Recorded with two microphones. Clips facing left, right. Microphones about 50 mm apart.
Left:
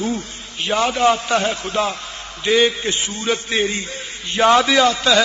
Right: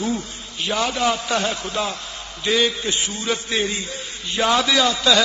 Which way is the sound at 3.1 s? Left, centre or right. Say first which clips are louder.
Left 3 dB; left.